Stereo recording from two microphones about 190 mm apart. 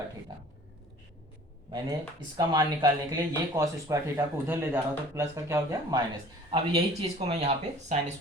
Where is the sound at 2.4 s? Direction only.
20° right (ahead or behind).